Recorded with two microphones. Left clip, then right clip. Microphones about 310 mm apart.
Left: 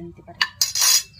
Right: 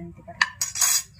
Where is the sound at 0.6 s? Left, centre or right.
Left.